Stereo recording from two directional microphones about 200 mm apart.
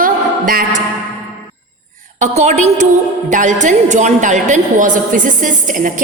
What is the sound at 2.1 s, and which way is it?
A woman's voice, 35° right (ahead or behind).